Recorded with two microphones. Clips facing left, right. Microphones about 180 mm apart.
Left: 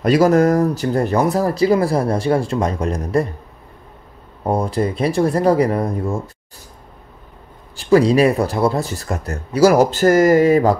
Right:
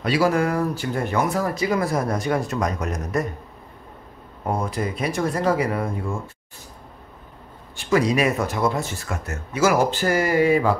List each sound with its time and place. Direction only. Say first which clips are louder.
0.0 s speech: left 7 dB; 45° left (ahead or behind)
4.5 s speech: left 6 dB; 35° left (ahead or behind)
7.7 s speech: left 7 dB; 35° left (ahead or behind)